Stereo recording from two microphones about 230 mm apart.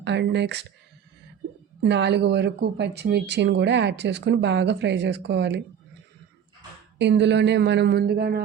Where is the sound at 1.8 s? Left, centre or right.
Right.